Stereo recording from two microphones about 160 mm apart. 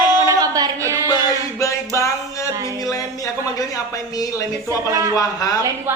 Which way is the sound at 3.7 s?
20° left (ahead or behind).